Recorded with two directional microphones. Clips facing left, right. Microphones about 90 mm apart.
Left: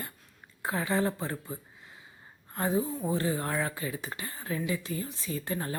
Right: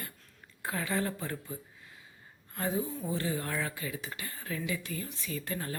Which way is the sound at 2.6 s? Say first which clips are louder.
Left 4 dB; 30° left (ahead or behind).